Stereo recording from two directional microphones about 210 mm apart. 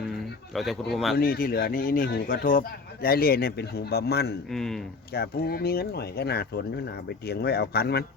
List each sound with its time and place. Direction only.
0.5 s speech: centre (ahead or behind)
1.1 s speech: 45° left (ahead or behind)
4.5 s speech: centre (ahead or behind)
5.1 s speech: 50° left (ahead or behind)